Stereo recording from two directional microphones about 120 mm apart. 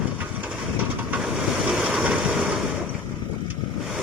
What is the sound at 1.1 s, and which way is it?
Vehicle, 5° right (ahead or behind).